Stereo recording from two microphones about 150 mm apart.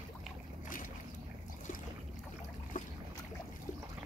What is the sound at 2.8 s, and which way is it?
Boat, 65° left (ahead or behind).